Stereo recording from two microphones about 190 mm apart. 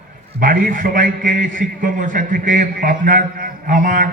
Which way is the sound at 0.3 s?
50° right (ahead or behind).